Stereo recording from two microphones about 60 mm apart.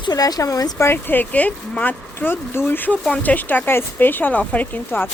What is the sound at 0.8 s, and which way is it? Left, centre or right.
Speech, left.